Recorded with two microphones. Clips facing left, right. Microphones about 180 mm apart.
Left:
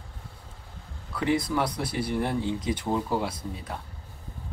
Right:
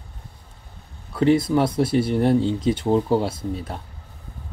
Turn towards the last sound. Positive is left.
turn(degrees=-30)  # may be behind; listen again after turning